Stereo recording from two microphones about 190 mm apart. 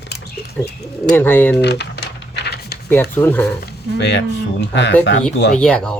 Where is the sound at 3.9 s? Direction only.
65° left (ahead or behind).